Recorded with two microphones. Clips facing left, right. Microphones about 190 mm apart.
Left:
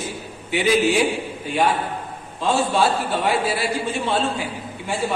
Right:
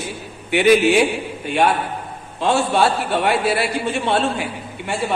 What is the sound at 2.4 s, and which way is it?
A woman's voice, 65° right (ahead or behind).